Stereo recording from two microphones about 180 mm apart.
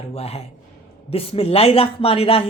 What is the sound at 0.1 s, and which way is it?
Speech, 35° left (ahead or behind).